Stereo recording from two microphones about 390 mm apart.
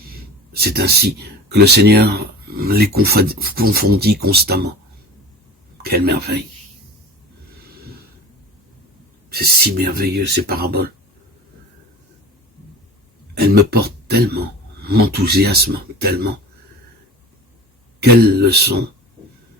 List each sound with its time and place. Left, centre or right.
0.5 s speech: right
5.7 s speech: right
9.3 s speech: right
13.3 s speech: right
18.0 s speech: right